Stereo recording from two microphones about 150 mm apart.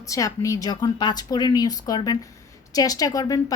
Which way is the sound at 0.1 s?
20° left (ahead or behind).